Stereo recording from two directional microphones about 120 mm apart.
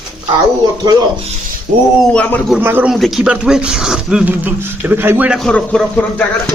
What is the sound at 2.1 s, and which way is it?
Speech, 10° left (ahead or behind).